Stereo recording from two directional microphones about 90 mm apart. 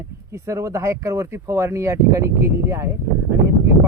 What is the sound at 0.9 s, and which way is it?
Speech, 35° right (ahead or behind).